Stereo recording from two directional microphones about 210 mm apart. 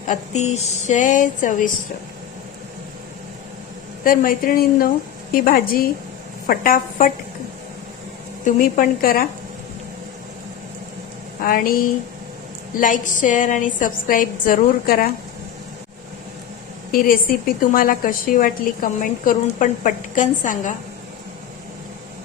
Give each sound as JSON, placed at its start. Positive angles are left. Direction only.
{"t": 0.1, "sound": "a woman's voice", "side_deg": 30}
{"t": 4.0, "sound": "a woman's voice", "side_deg": 40}
{"t": 8.4, "sound": "a woman's voice", "side_deg": 40}
{"t": 11.4, "sound": "a woman's voice", "side_deg": 40}
{"t": 16.9, "sound": "a woman's voice", "side_deg": 40}